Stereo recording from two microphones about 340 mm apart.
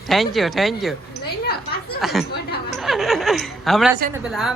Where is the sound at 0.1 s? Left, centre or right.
Centre.